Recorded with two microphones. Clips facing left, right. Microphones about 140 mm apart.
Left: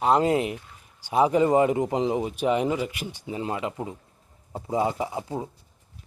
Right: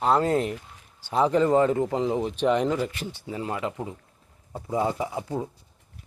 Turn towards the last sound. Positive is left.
turn(degrees=20)  # may be behind; listen again after turning